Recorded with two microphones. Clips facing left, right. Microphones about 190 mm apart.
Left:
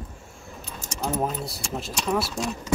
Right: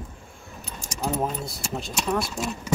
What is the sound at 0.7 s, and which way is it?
Keys jangling, 10° right (ahead or behind).